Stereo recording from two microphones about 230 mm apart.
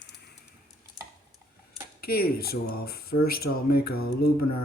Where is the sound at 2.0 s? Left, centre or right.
Left.